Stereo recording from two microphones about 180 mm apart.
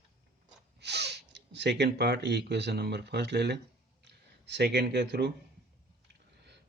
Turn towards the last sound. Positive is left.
turn(degrees=-65)  # may be behind; listen again after turning